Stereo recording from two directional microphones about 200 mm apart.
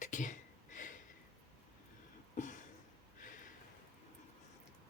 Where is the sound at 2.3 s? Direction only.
40° left (ahead or behind).